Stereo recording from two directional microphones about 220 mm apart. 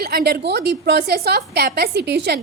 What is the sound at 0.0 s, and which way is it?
A woman's voice, 45° right (ahead or behind).